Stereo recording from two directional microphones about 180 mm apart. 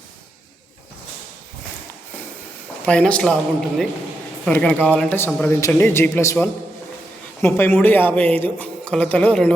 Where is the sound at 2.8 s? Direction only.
5° left (ahead or behind).